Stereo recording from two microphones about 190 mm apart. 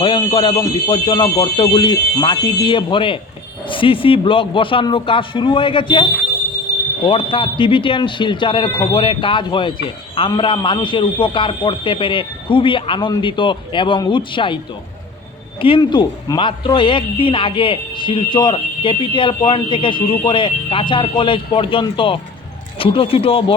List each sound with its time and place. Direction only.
0.0 s speech: 25° left (ahead or behind)